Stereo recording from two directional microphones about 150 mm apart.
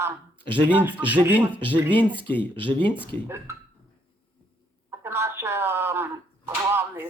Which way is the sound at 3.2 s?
15° right (ahead or behind).